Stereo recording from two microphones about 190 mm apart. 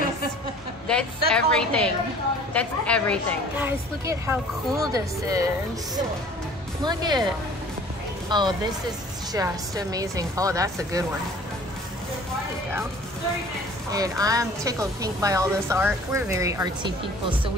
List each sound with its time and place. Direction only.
0.8 s a woman's voice: 5° left (ahead or behind)
3.5 s a woman's voice: 15° right (ahead or behind)
6.8 s speech: 20° right (ahead or behind)
8.3 s a woman's voice: 25° right (ahead or behind)
13.9 s a woman's voice: 20° right (ahead or behind)